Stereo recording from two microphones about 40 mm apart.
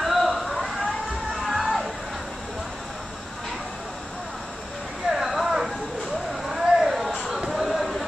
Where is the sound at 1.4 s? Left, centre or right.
Centre.